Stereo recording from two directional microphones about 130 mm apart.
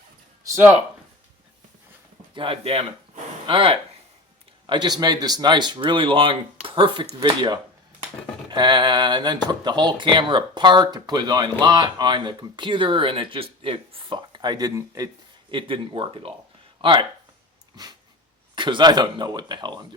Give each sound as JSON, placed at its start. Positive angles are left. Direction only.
{"t": 2.3, "sound": "speech", "side_deg": -40}
{"t": 15.4, "sound": "speech", "side_deg": -40}
{"t": 18.5, "sound": "speech", "side_deg": -35}